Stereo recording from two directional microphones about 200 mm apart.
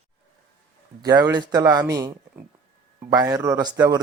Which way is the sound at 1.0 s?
20° right (ahead or behind).